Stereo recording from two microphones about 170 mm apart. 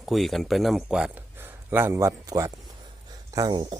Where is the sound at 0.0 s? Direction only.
Centre (ahead or behind).